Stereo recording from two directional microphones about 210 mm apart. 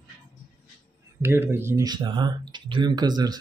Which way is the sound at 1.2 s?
10° right (ahead or behind).